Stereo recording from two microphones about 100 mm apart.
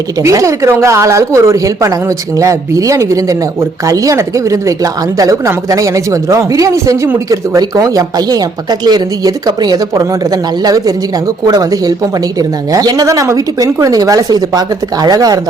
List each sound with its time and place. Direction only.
0.2 s a woman's voice: 30° right (ahead or behind)